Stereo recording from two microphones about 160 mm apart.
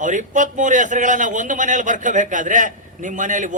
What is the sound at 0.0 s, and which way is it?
A man's voice, 50° right (ahead or behind).